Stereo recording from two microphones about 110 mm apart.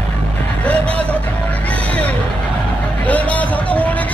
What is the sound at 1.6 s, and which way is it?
Music, 15° left (ahead or behind).